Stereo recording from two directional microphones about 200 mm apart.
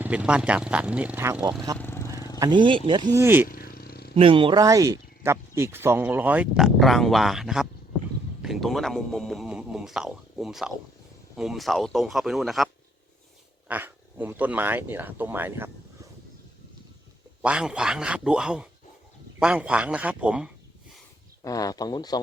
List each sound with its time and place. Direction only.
0.0 s speech: 5° right (ahead or behind)
1.8 s vehicle: 10° left (ahead or behind)
2.4 s speech: 25° right (ahead or behind)
3.2 s speech: 10° right (ahead or behind)
3.5 s vehicle: 50° left (ahead or behind)
4.1 s a man's voice: 25° right (ahead or behind); by 15.7 s 10° right (ahead or behind)
17.4 s a man's voice: 5° right (ahead or behind)
21.4 s speech: 20° left (ahead or behind)